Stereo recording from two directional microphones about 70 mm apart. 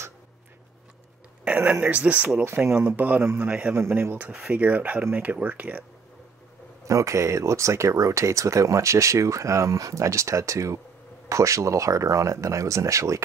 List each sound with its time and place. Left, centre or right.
1.6 s speech: right
3.7 s speech: right
4.3 s speech: centre
4.6 s speech: right
6.8 s speech: right